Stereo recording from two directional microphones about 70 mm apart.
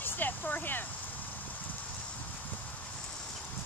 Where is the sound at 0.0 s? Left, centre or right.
Left.